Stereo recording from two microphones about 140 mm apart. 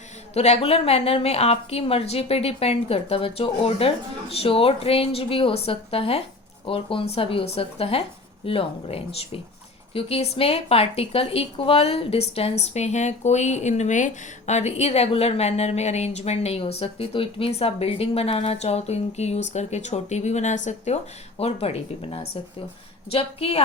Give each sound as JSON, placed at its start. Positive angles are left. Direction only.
{"t": 0.3, "sound": "speech", "side_deg": 50}